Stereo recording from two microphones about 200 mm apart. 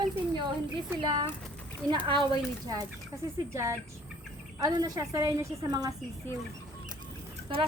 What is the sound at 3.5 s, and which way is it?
A woman's voice, 15° right (ahead or behind).